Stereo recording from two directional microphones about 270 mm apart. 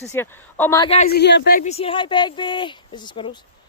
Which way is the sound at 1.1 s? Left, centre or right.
Left.